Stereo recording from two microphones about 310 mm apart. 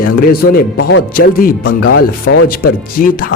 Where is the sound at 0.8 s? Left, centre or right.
Left.